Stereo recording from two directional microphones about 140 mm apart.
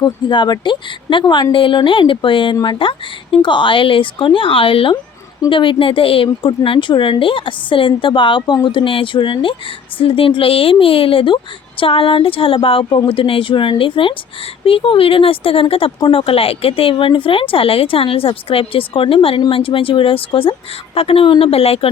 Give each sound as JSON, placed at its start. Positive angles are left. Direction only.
{"t": 0.0, "sound": "a woman's voice", "side_deg": 30}